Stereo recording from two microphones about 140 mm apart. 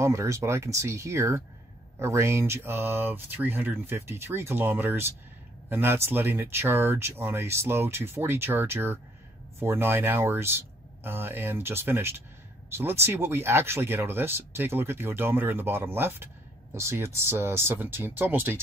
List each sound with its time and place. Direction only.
0.0 s speech: 20° right (ahead or behind)